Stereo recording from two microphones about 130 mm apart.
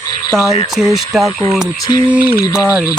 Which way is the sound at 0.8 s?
Centre (ahead or behind).